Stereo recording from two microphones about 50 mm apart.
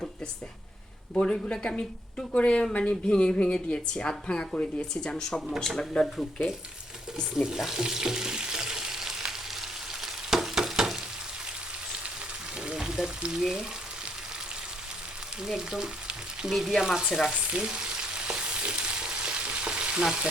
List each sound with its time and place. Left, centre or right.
1.2 s speech: centre
7.4 s frying: centre
12.6 s speech: centre
15.4 s frying: centre
16.5 s frying: centre
16.8 s frying: centre
17.3 s frying: right